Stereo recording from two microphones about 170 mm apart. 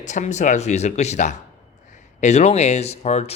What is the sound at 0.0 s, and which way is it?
A man's voice, 45° left (ahead or behind).